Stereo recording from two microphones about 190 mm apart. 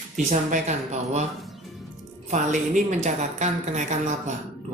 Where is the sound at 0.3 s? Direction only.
35° right (ahead or behind).